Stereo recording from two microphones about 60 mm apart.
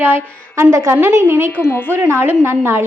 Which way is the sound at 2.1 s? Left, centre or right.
Right.